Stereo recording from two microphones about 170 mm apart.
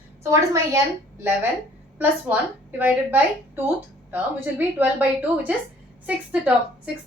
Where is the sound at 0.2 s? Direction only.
20° right (ahead or behind).